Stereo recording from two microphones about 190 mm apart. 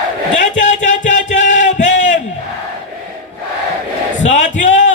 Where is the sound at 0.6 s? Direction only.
40° left (ahead or behind).